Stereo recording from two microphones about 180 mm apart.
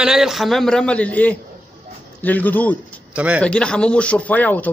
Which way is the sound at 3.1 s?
5° right (ahead or behind).